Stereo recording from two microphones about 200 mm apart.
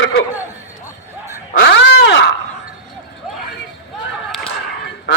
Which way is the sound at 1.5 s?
60° left (ahead or behind).